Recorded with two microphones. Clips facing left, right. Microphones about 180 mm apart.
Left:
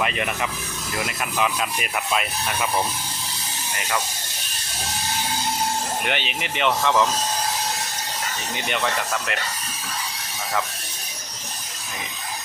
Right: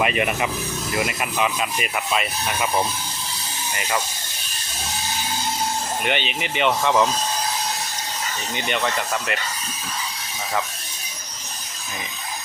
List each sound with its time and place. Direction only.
0.0 s speech: 10° right (ahead or behind)
6.1 s speech: centre (ahead or behind)
8.5 s speech: centre (ahead or behind)